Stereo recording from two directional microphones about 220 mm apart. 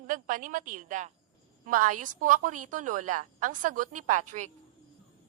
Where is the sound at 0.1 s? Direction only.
35° right (ahead or behind).